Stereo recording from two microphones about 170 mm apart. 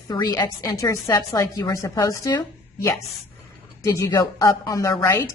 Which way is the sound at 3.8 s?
20° left (ahead or behind).